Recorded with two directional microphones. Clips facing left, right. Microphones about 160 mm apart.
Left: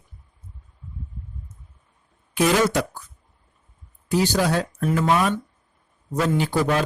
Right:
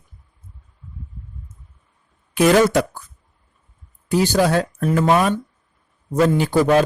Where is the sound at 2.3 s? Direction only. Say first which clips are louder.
Right 5 dB; 60° right (ahead or behind).